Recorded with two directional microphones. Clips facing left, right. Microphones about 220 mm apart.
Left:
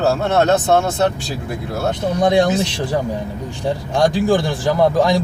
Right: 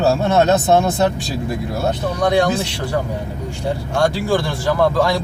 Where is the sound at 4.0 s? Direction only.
15° left (ahead or behind).